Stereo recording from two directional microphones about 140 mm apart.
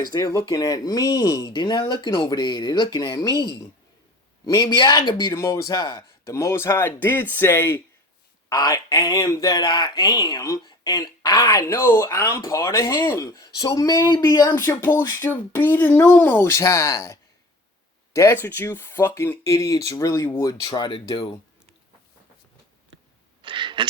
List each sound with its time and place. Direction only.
0.1 s speech: 25° left (ahead or behind)
6.3 s speech: 20° left (ahead or behind)
11.6 s speech: 15° left (ahead or behind); by 21.3 s 35° left (ahead or behind)
23.4 s a sound: 35° right (ahead or behind)